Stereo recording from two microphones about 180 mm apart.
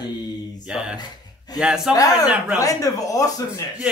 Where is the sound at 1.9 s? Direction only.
20° left (ahead or behind).